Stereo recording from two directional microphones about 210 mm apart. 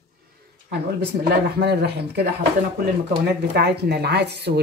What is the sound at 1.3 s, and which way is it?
Speech, 50° right (ahead or behind).